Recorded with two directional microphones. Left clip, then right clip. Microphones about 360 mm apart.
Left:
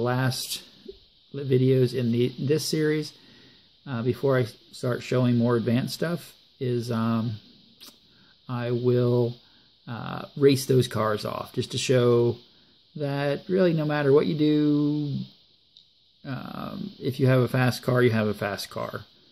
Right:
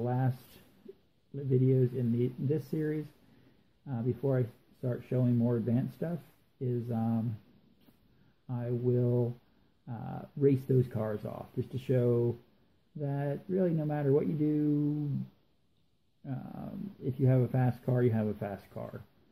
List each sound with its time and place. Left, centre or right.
0.0 s speech: left
1.3 s speech: centre
8.5 s speech: left
16.2 s speech: centre